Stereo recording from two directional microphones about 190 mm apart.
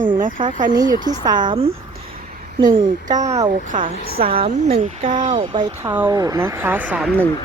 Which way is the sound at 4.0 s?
55° right (ahead or behind).